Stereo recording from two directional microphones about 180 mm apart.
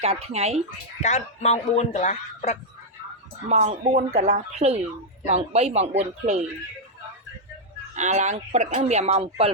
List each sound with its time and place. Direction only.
0.0 s speech: 35° right (ahead or behind)
1.0 s speech: 40° left (ahead or behind)
3.5 s speech: 40° right (ahead or behind)
7.9 s speech: 40° right (ahead or behind)